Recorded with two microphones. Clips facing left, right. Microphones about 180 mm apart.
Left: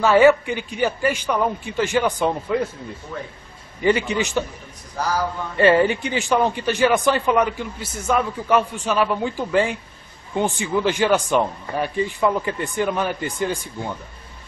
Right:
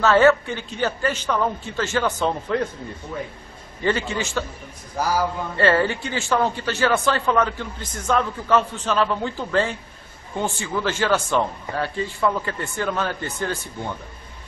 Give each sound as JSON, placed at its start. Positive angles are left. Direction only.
{"t": 0.0, "sound": "speech", "side_deg": 10}
{"t": 3.8, "sound": "speech", "side_deg": 15}
{"t": 5.6, "sound": "speech", "side_deg": 15}